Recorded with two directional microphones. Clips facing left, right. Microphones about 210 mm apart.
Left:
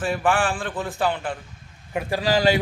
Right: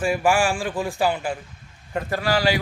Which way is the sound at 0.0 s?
10° right (ahead or behind).